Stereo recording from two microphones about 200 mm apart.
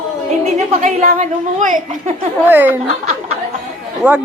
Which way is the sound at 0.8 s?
35° right (ahead or behind).